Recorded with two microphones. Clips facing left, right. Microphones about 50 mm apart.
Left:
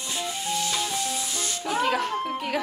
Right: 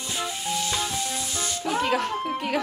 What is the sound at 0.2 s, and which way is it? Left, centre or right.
Music, centre.